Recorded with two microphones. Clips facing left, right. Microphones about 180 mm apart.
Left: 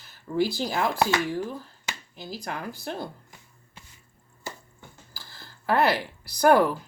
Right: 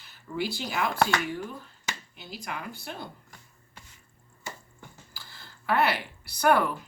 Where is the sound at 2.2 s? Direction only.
40° left (ahead or behind).